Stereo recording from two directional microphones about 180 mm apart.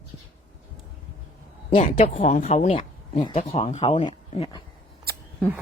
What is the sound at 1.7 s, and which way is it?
Speech, 35° left (ahead or behind).